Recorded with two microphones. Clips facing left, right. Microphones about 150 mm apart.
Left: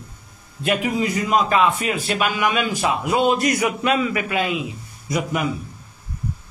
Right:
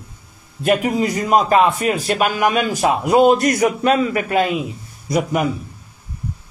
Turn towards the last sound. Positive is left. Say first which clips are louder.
# right 4 dB
turn(degrees=-40)  # may be behind; listen again after turning